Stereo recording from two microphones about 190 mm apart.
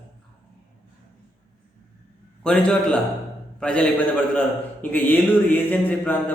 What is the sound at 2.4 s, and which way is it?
A man's voice, 5° left (ahead or behind).